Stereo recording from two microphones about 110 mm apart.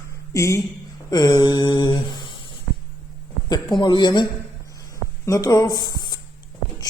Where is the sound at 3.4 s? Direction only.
40° left (ahead or behind).